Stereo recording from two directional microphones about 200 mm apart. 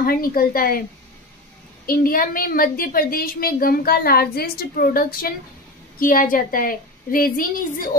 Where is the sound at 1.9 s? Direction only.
45° left (ahead or behind).